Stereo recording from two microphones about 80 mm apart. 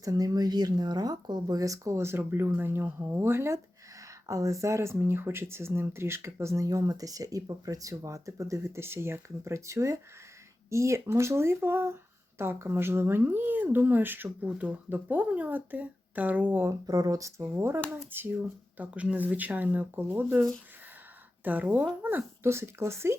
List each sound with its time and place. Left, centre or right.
0.0 s speech: right; by 16.6 s centre
16.8 s speech: right
21.4 s speech: right